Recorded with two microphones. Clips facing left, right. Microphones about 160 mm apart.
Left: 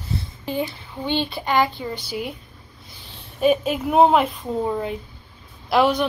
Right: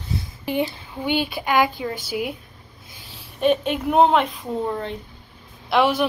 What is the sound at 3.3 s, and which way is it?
Speech, 5° left (ahead or behind).